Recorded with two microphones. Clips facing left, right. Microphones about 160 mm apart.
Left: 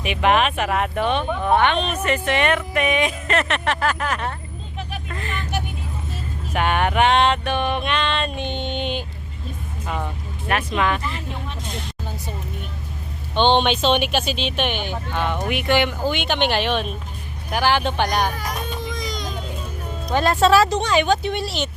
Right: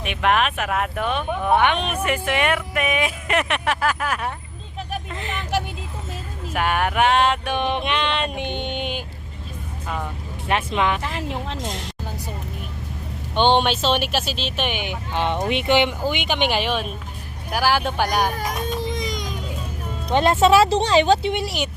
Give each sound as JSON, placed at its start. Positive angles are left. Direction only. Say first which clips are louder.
{"t": 0.0, "sound": "speech", "louder": "left 2 dB", "side_deg": 0}
{"t": 5.1, "sound": "vehicle", "louder": "even", "side_deg": -20}
{"t": 5.4, "sound": "vehicle", "louder": "right 5 dB", "side_deg": -90}
{"t": 6.5, "sound": "a sound", "louder": "left 1 dB", "side_deg": -5}
{"t": 10.5, "sound": "speech", "louder": "even", "side_deg": -20}
{"t": 11.0, "sound": "speech", "louder": "right 3 dB", "side_deg": -90}
{"t": 13.3, "sound": "speech", "louder": "even", "side_deg": -10}
{"t": 15.1, "sound": "speech", "louder": "right 2 dB", "side_deg": -25}
{"t": 18.8, "sound": "a sound", "louder": "right 2 dB", "side_deg": -25}
{"t": 20.1, "sound": "speech", "louder": "right 1 dB", "side_deg": -20}